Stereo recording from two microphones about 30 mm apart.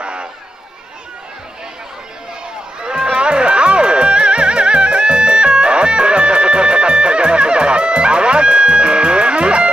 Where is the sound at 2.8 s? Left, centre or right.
Right.